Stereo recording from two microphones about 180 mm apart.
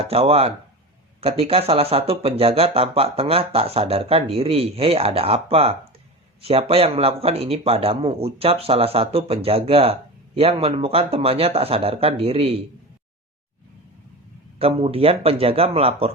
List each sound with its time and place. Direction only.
0.0 s speech: 35° right (ahead or behind)
14.6 s speech: 30° right (ahead or behind)